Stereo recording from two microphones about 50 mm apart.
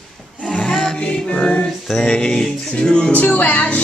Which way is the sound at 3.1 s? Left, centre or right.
Left.